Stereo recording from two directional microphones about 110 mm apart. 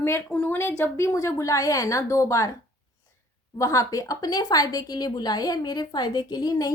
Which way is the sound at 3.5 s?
30° left (ahead or behind).